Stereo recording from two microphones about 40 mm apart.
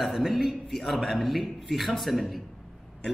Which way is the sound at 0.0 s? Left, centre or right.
Centre.